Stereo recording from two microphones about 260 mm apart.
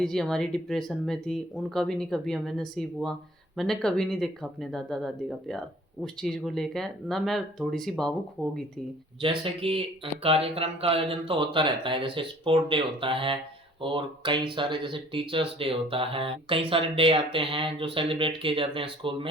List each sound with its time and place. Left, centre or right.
0.0 s speech: centre
9.2 s speech: centre